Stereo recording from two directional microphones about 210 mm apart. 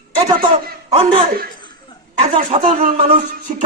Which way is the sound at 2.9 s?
25° right (ahead or behind).